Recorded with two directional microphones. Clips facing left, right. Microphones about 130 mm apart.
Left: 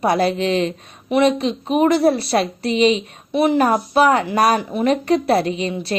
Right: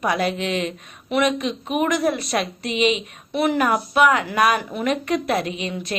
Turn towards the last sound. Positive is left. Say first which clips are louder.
# left 6 dB
turn(degrees=35)  # may be behind; listen again after turning